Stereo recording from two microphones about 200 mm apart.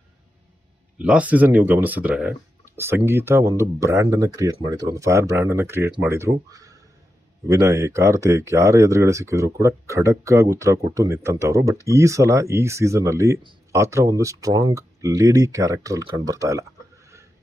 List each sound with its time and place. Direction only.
0.9 s speech: 5° right (ahead or behind)